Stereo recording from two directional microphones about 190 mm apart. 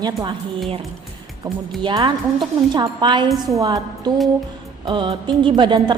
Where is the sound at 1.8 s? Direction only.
25° right (ahead or behind).